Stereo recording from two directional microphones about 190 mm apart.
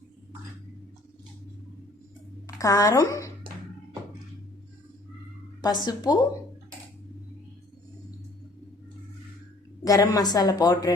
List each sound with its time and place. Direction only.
2.6 s a woman's voice: 15° left (ahead or behind)
5.6 s a woman's voice: 20° left (ahead or behind)
9.8 s a woman's voice: 20° left (ahead or behind)